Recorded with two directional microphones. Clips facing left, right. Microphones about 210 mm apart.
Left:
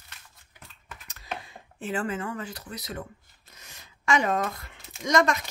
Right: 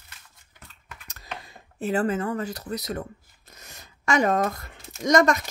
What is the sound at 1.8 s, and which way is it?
Speech, 40° right (ahead or behind).